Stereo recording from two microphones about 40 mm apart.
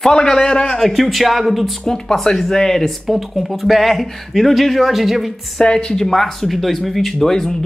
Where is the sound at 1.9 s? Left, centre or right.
Centre.